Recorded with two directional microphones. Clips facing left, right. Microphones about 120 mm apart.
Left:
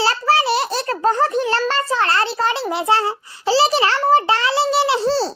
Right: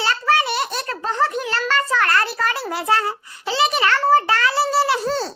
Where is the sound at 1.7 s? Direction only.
25° left (ahead or behind).